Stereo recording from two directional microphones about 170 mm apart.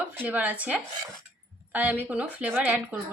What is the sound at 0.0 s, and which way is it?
Speech, 10° right (ahead or behind).